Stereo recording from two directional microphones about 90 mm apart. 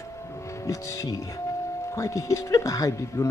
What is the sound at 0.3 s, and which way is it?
Speech, 35° left (ahead or behind).